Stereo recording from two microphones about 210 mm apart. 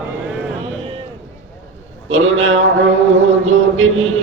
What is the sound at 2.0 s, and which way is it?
Speech, 70° right (ahead or behind).